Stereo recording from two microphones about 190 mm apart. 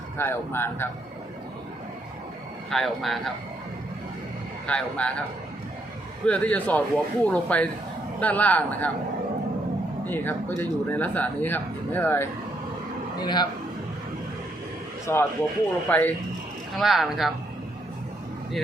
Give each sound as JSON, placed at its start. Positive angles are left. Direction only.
{"t": 0.2, "sound": "speech", "side_deg": 10}
{"t": 2.6, "sound": "speech", "side_deg": 0}
{"t": 4.6, "sound": "speech", "side_deg": 5}
{"t": 6.2, "sound": "speech", "side_deg": 5}
{"t": 10.1, "sound": "speech", "side_deg": 10}
{"t": 13.2, "sound": "a man's voice", "side_deg": 25}
{"t": 15.0, "sound": "speech", "side_deg": 10}
{"t": 16.7, "sound": "speech", "side_deg": 0}